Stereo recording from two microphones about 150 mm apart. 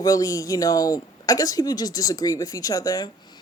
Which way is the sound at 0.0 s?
25° left (ahead or behind).